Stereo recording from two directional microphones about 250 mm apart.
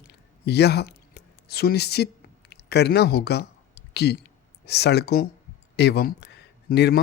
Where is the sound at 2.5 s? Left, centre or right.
Left.